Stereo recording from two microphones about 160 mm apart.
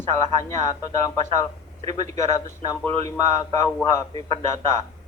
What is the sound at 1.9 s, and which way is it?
A man's voice, 20° left (ahead or behind).